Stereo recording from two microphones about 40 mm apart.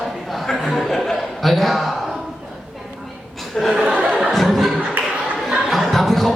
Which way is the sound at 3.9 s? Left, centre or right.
Right.